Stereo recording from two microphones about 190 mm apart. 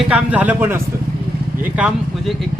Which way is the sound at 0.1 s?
10° right (ahead or behind).